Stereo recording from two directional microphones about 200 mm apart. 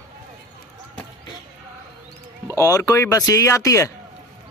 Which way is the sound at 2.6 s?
15° left (ahead or behind).